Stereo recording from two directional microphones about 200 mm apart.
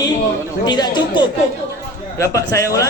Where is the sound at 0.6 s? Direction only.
20° left (ahead or behind).